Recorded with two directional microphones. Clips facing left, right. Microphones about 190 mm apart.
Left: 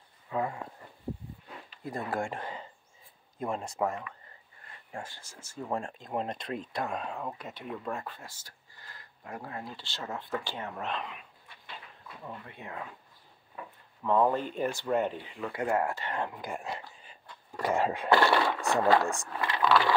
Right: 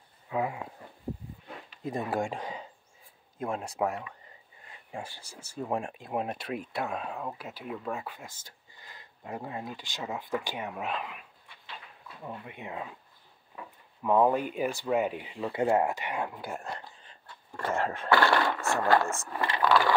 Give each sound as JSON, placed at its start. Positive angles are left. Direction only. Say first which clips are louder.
{"t": 0.3, "sound": "a sound", "louder": "right 1 dB", "side_deg": -10}
{"t": 1.8, "sound": "speech", "louder": "right 3 dB", "side_deg": -20}
{"t": 3.3, "sound": "speech", "louder": "right 1 dB", "side_deg": -5}
{"t": 4.6, "sound": "a sound", "louder": "right 2 dB", "side_deg": -15}
{"t": 5.5, "sound": "speech", "louder": "right 2 dB", "side_deg": -15}
{"t": 8.3, "sound": "speech", "louder": "right 1 dB", "side_deg": -20}
{"t": 12.3, "sound": "speech", "louder": "right 3 dB", "side_deg": -15}
{"t": 14.0, "sound": "speech", "louder": "right 2 dB", "side_deg": -15}
{"t": 16.6, "sound": "a sound", "louder": "left 1 dB", "side_deg": 10}
{"t": 18.8, "sound": "speech", "louder": "left 1 dB", "side_deg": 0}